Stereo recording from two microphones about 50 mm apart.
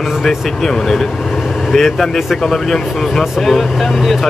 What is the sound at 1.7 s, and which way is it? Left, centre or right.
Speech, centre.